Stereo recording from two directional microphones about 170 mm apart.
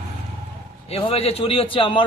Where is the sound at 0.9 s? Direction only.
35° left (ahead or behind).